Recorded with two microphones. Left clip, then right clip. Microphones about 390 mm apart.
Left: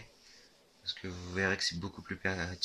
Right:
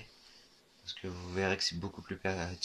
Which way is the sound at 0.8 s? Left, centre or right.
Centre.